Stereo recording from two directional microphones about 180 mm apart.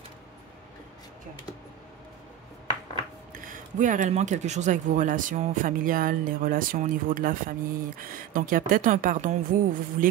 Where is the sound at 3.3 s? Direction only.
50° right (ahead or behind).